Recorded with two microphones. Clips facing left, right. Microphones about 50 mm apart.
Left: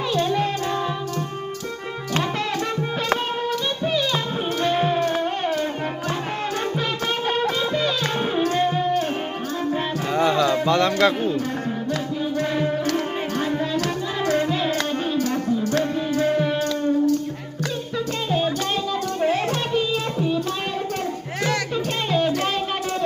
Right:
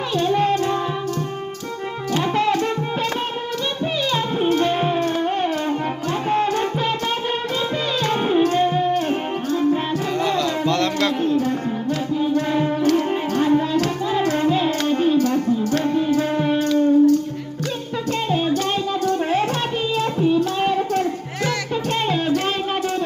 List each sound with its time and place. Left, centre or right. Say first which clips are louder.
0.2 s music: right 6 dB; right
3.8 s music: right 1 dB; centre
7.3 s music: left 1 dB; centre
10.2 s music: left 4 dB; centre
10.5 s a sound: left 1 dB; centre
12.4 s music: right 2 dB; centre
20.6 s child singing: right 7 dB; centre
22.1 s music: left 3 dB; centre